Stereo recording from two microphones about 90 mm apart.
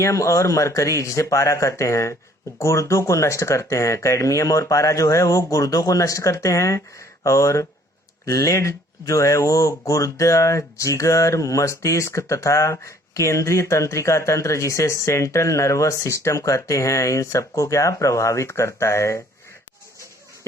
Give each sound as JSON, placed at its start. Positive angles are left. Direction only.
{"t": 0.0, "sound": "speech", "side_deg": 35}